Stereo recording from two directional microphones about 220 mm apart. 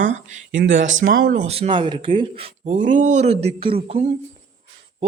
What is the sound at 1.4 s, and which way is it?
A man's voice, 30° right (ahead or behind).